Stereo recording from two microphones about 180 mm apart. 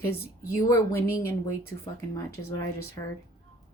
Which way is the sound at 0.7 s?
15° left (ahead or behind).